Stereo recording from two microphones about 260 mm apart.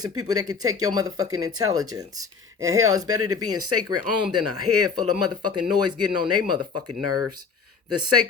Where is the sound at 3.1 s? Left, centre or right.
Right.